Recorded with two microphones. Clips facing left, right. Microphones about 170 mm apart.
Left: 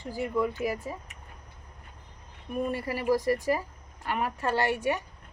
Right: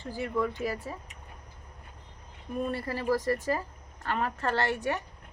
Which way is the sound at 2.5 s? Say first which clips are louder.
Left 1 dB; 15° left (ahead or behind).